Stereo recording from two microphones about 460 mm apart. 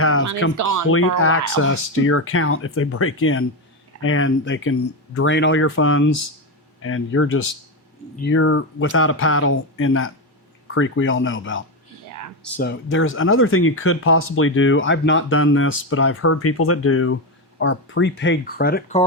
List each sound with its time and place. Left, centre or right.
0.0 s music: left
0.5 s speech: right
0.9 s speech: left